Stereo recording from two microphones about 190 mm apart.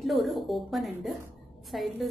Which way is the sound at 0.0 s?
Centre (ahead or behind).